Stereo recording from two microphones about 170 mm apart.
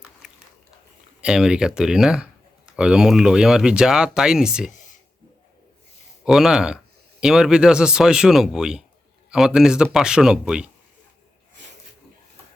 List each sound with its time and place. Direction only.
1.2 s a man's voice: 5° right (ahead or behind)
4.7 s a sound: 45° left (ahead or behind)
6.2 s a man's voice: 5° right (ahead or behind)